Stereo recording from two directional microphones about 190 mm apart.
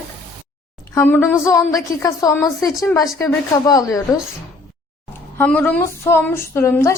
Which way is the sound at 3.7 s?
20° left (ahead or behind).